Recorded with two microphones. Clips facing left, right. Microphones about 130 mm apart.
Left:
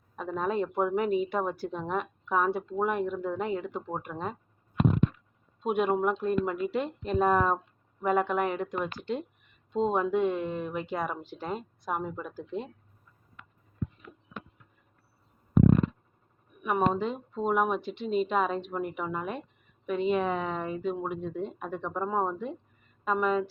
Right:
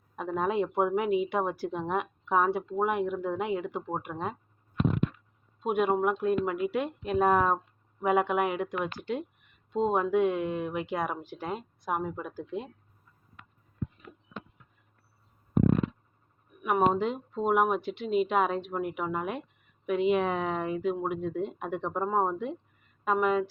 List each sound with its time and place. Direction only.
0.3 s speech: 10° right (ahead or behind)
5.6 s speech: 5° right (ahead or behind)
9.7 s speech: 5° right (ahead or behind)
16.6 s speech: 10° right (ahead or behind)